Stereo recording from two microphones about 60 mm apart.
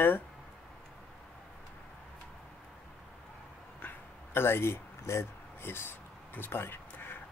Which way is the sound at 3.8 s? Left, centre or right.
Left.